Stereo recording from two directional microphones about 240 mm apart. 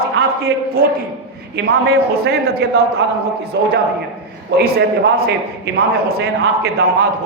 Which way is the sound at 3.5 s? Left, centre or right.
Right.